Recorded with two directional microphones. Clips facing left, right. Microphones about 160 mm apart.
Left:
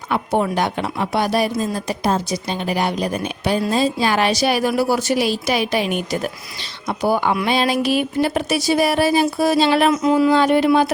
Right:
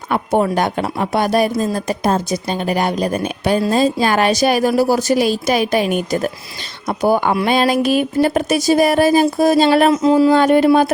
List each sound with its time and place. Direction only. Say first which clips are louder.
0.1 s speech: right 3 dB; 45° right (ahead or behind)
9.9 s speech: right 3 dB; 30° right (ahead or behind)
10.3 s speech: right 3 dB; 50° right (ahead or behind)